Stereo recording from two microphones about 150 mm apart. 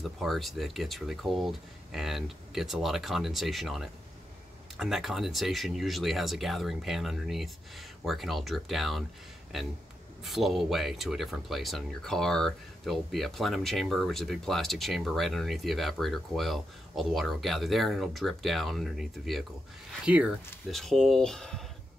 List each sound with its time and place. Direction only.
0.0 s speech: centre (ahead or behind)
10.2 s speech: centre (ahead or behind)